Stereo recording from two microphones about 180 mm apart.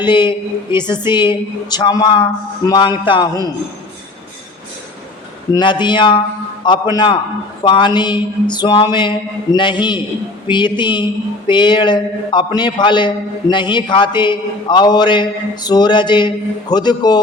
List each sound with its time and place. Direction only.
0.0 s speech: 25° left (ahead or behind)
5.5 s speech: 25° left (ahead or behind)